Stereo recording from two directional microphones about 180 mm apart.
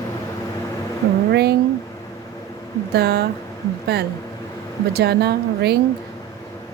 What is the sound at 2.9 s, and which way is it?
Speech, 65° right (ahead or behind).